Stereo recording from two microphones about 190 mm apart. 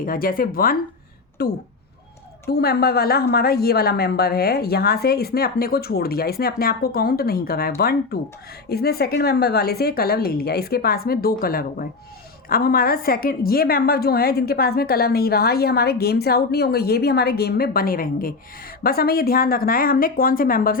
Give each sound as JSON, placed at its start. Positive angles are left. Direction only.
{"t": 0.0, "sound": "a woman's voice", "side_deg": 45}